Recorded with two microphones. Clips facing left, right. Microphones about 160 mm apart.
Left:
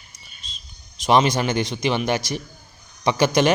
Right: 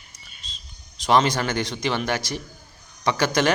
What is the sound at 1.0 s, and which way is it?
A man's voice, 15° left (ahead or behind).